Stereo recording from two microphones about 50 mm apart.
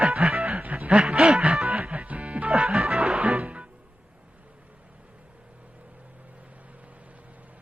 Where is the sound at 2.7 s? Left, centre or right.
Centre.